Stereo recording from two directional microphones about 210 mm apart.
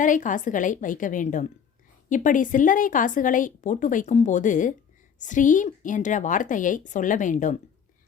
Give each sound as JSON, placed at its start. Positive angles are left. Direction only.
{"t": 0.0, "sound": "a woman's voice", "side_deg": 40}